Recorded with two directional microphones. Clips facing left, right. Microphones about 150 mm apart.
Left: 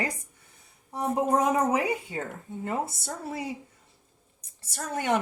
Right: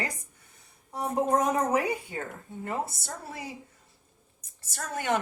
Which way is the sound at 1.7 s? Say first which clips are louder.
Left 1 dB; 20° left (ahead or behind).